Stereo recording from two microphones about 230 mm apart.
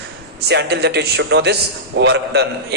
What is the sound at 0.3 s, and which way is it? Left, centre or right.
A man's voice, right.